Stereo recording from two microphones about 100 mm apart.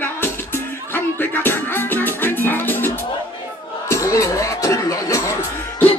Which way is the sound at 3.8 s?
30° left (ahead or behind).